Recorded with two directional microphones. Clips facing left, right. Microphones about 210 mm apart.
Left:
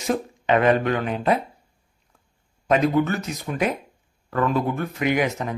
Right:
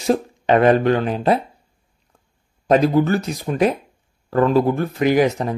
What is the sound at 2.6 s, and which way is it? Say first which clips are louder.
Speech: right 4 dB; 35° right (ahead or behind).